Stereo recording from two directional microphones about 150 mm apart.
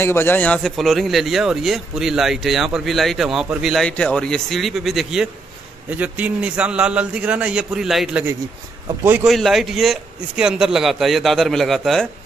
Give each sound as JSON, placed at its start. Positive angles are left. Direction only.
{"t": 0.0, "sound": "a man's voice", "side_deg": 15}
{"t": 9.3, "sound": "a man's voice", "side_deg": 0}